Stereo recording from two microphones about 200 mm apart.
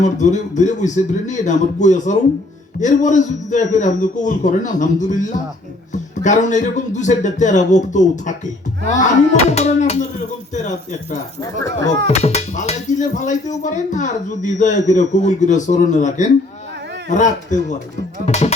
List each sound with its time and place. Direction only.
0.0 s speech: 35° left (ahead or behind)
11.6 s speech: 20° left (ahead or behind)
12.0 s speech: 30° left (ahead or behind)